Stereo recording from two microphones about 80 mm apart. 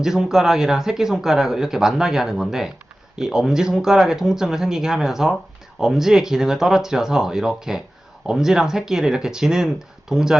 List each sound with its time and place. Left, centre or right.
0.0 s speech: centre